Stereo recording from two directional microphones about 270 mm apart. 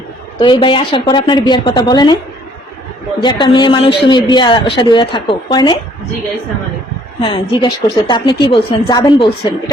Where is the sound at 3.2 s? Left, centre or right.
Centre.